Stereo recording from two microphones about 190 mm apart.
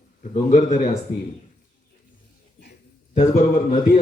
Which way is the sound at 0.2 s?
40° left (ahead or behind).